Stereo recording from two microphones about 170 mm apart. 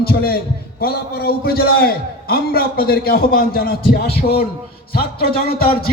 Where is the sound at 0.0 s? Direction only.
65° left (ahead or behind).